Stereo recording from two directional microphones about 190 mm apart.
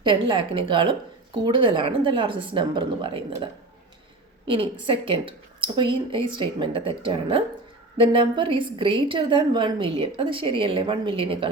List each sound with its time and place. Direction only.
0.0 s a woman's voice: 25° right (ahead or behind)